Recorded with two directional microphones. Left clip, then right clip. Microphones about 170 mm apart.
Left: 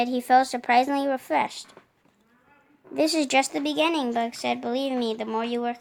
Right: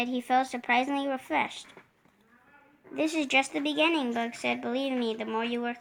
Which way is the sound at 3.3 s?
50° left (ahead or behind).